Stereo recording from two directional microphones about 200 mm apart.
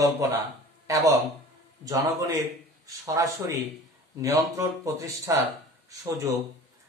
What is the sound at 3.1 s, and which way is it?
Speech, 15° right (ahead or behind).